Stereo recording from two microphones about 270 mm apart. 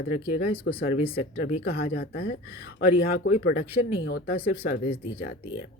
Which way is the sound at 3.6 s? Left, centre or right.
Left.